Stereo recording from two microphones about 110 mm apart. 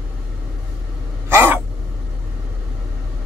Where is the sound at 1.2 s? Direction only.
20° right (ahead or behind).